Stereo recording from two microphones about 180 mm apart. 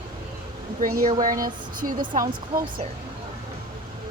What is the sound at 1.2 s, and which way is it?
A woman's voice, 50° right (ahead or behind).